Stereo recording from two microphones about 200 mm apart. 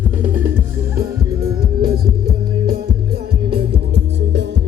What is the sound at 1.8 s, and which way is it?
Music, 50° right (ahead or behind).